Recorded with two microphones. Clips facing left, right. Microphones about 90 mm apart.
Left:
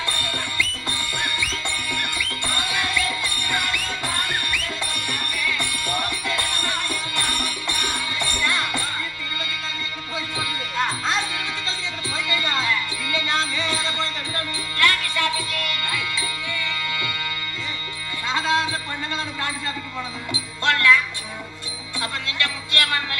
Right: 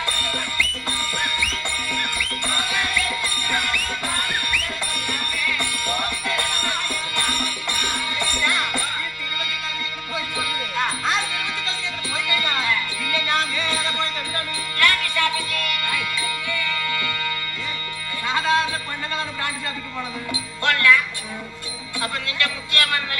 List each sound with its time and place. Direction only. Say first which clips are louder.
1.2 s music: even; 30° left (ahead or behind)
10.2 s music: right 2 dB; 30° left (ahead or behind)
18.3 s music: right 2 dB; 20° left (ahead or behind)
20.3 s music: left 1 dB; 25° left (ahead or behind)
22.0 s music: right 1 dB; 25° left (ahead or behind)